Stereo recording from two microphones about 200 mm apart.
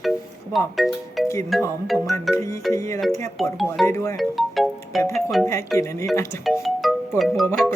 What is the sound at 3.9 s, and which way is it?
Speech, 15° left (ahead or behind).